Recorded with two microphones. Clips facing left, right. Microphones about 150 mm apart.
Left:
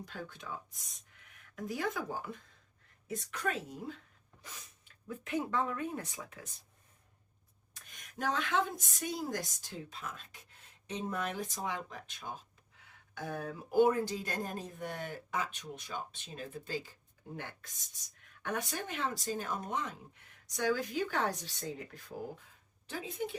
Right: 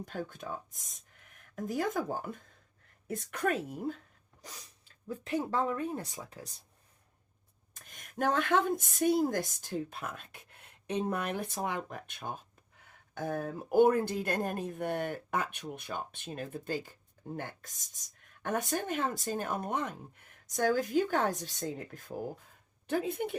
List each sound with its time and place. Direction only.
0.0 s speech: 50° right (ahead or behind)
5.0 s speech: 30° right (ahead or behind)
7.7 s speech: 50° right (ahead or behind)